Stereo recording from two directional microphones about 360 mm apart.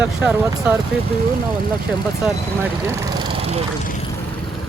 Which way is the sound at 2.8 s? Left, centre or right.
Centre.